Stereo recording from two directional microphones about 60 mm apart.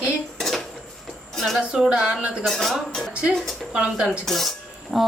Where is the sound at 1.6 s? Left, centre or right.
Centre.